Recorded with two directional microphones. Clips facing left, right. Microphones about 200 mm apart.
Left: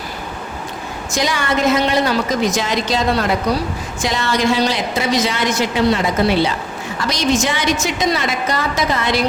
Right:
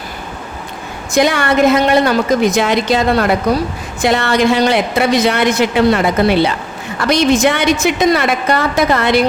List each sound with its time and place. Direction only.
1.1 s a woman's voice: 60° right (ahead or behind)